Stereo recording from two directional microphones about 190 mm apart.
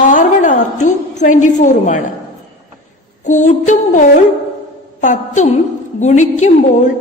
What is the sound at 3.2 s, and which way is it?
A woman's voice, 40° left (ahead or behind).